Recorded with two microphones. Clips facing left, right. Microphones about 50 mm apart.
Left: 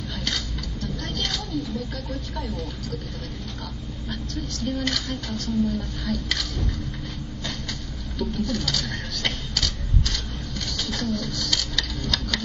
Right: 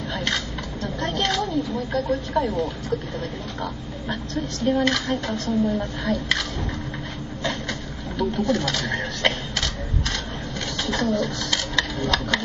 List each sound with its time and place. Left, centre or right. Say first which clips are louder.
0.1 s a sound: right 5 dB; right
0.8 s vehicle: right 6 dB; right
2.3 s a woman's voice: right 10 dB; right
4.6 s a woman's voice: right 7 dB; right
8.2 s a sound: right 5 dB; right
10.8 s bird: right 6 dB; right